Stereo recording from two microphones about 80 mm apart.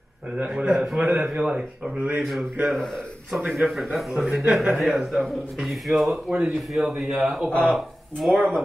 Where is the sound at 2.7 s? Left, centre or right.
Centre.